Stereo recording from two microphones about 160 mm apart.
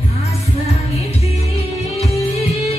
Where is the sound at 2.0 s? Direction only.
40° left (ahead or behind).